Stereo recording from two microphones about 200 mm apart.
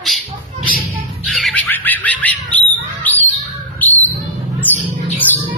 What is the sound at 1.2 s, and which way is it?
Squawk, centre (ahead or behind).